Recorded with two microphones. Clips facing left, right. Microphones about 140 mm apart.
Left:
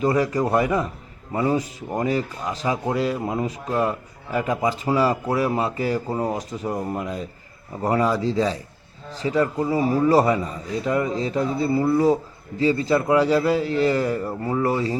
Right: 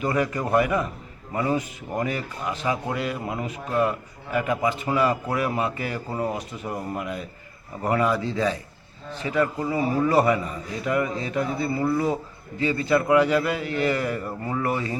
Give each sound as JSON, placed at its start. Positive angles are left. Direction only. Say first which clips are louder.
{"t": 0.2, "sound": "speech", "louder": "left 2 dB", "side_deg": 30}
{"t": 6.1, "sound": "speech", "louder": "left 3 dB", "side_deg": 15}
{"t": 6.3, "sound": "a man's voice", "louder": "left 4 dB", "side_deg": 40}